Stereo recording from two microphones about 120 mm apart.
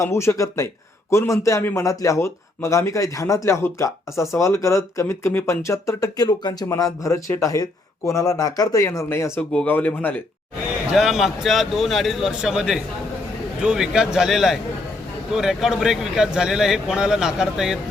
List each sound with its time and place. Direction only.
0.0 s speech: 25° left (ahead or behind)
10.9 s speech: centre (ahead or behind)